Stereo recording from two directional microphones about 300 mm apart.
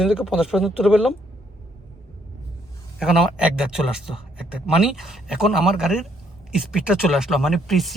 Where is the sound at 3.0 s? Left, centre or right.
Centre.